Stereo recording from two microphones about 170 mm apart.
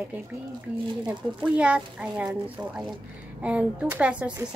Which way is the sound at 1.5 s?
5° right (ahead or behind).